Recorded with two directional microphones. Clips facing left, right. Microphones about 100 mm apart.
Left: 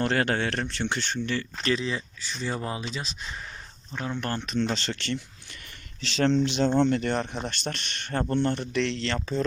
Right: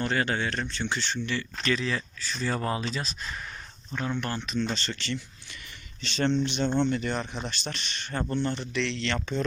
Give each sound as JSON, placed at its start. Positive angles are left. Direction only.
{"t": 0.0, "sound": "speech", "side_deg": 70}
{"t": 1.7, "sound": "speech", "side_deg": 25}
{"t": 4.7, "sound": "speech", "side_deg": 80}
{"t": 6.0, "sound": "speech", "side_deg": 90}
{"t": 6.7, "sound": "speech", "side_deg": 35}
{"t": 6.9, "sound": "speech", "side_deg": 60}